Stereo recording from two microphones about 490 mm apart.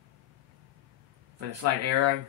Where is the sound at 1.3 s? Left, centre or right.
Right.